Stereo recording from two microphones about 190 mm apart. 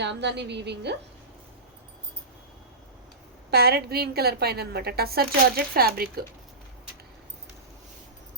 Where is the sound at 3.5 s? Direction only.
55° right (ahead or behind).